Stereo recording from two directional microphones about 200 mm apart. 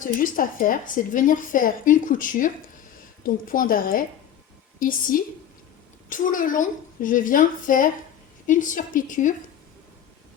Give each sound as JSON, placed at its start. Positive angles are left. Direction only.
{"t": 0.0, "sound": "a woman's voice", "side_deg": 40}